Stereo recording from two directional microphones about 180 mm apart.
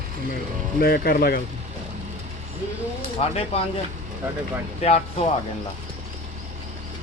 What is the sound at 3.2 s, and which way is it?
Speech, 35° left (ahead or behind).